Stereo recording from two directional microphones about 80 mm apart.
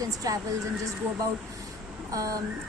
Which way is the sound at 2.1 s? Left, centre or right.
Right.